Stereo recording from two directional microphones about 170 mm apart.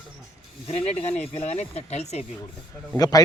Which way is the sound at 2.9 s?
20° left (ahead or behind).